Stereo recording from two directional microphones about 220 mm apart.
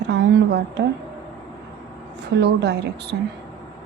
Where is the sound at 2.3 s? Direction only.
50° right (ahead or behind).